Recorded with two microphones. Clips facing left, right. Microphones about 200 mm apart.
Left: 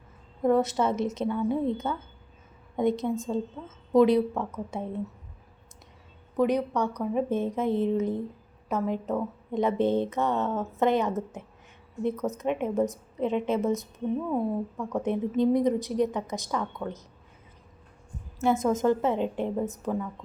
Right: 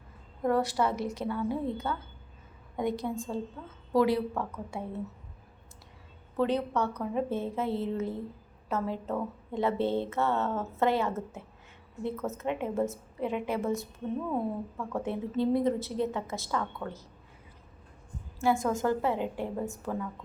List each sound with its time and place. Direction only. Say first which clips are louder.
0.4 s a woman's voice: left 4 dB; 20° left (ahead or behind)
6.3 s a woman's voice: left 3 dB; 15° left (ahead or behind)
18.3 s a woman's voice: left 3 dB; 20° left (ahead or behind)